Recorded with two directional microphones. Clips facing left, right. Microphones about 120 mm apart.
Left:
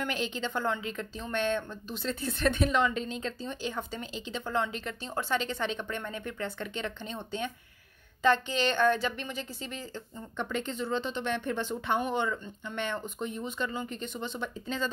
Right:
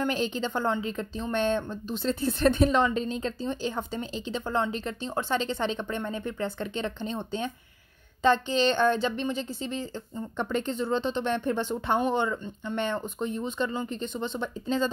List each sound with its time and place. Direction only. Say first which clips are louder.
0.0 s a woman's voice: right 5 dB; 35° right (ahead or behind)
10.3 s a woman's voice: right 4 dB; 40° right (ahead or behind)